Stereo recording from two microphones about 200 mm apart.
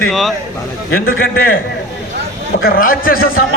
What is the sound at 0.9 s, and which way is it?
Speech, 50° left (ahead or behind).